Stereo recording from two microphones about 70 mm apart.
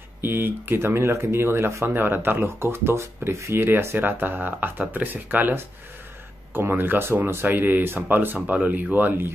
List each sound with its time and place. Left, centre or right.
0.2 s speech: right